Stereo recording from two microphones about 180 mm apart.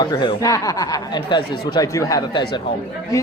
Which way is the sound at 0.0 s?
20° left (ahead or behind).